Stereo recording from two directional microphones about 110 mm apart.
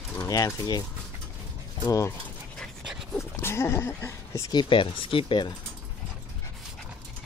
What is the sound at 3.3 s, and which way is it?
Speech, 25° left (ahead or behind).